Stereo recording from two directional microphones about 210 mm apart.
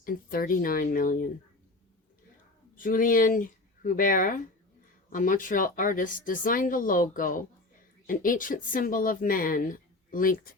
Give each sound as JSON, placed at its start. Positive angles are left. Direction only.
{"t": 0.0, "sound": "speech", "side_deg": 45}
{"t": 2.7, "sound": "speech", "side_deg": 40}